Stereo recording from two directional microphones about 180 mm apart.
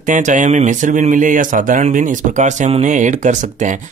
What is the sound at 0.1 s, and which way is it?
Speech, 45° right (ahead or behind).